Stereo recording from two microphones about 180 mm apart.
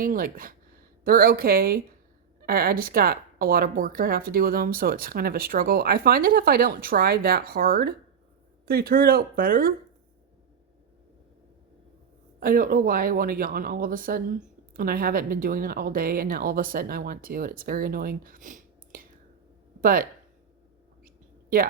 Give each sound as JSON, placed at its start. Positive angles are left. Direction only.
{"t": 0.0, "sound": "a woman's voice", "side_deg": -50}
{"t": 12.4, "sound": "a woman's voice", "side_deg": -50}